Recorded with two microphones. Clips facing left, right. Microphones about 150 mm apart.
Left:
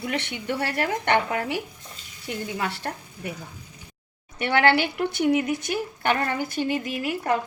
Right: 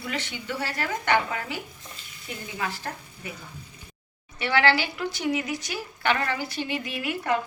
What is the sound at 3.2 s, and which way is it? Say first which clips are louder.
Speech: left 5 dB; 60° left (ahead or behind).